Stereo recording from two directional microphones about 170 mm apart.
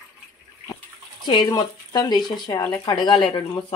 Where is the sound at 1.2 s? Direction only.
25° left (ahead or behind).